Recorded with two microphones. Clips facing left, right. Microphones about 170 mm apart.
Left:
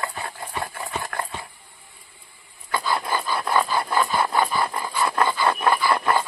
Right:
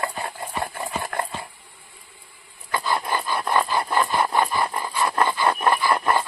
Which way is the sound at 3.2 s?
10° right (ahead or behind).